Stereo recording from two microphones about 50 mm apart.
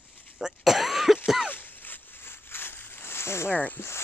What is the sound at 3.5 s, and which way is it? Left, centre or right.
Speech, left.